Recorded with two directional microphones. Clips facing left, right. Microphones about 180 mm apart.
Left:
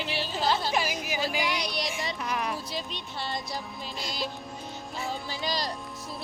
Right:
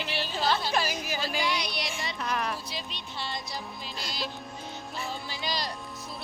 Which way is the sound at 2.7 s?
50° left (ahead or behind).